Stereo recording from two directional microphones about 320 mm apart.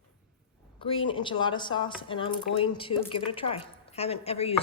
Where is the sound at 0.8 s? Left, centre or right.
Centre.